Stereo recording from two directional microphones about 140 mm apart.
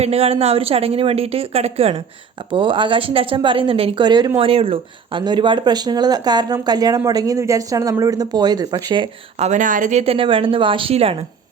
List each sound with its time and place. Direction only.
0.0 s a woman's voice: 45° right (ahead or behind); by 9.0 s 30° right (ahead or behind)
9.4 s speech: 60° right (ahead or behind)
10.0 s a woman's voice: 40° right (ahead or behind)